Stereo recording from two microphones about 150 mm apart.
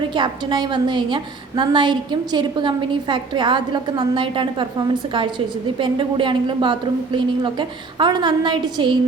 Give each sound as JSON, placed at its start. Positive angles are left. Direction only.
{"t": 0.1, "sound": "a woman's voice", "side_deg": -30}
{"t": 5.8, "sound": "a woman's voice", "side_deg": -35}